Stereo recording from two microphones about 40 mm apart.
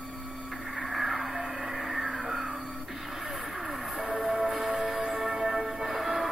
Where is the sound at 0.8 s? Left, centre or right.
Centre.